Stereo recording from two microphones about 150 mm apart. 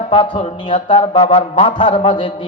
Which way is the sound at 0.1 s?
35° left (ahead or behind).